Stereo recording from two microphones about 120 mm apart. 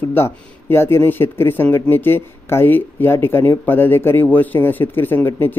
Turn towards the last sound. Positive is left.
turn(degrees=20)  # may be behind; listen again after turning